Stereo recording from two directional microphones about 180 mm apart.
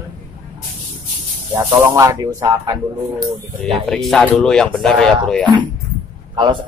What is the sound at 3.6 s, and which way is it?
Speech, centre (ahead or behind).